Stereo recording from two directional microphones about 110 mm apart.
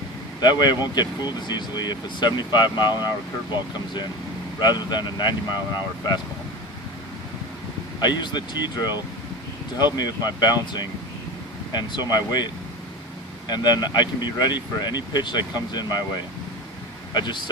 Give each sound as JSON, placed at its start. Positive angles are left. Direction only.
{"t": 0.3, "sound": "speech", "side_deg": 40}
{"t": 4.6, "sound": "speech", "side_deg": 40}
{"t": 7.9, "sound": "speech", "side_deg": 40}
{"t": 13.5, "sound": "speech", "side_deg": 40}
{"t": 17.2, "sound": "speech", "side_deg": 45}